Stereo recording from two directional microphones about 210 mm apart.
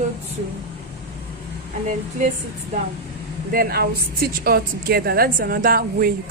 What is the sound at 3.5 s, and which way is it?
A woman's voice, 45° right (ahead or behind).